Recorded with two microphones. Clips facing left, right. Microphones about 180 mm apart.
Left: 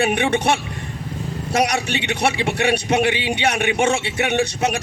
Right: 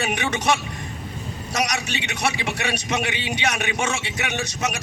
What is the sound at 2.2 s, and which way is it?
Speech, 60° left (ahead or behind).